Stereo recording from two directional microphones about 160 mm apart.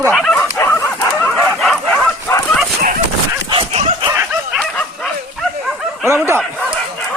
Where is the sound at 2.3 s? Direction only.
10° left (ahead or behind).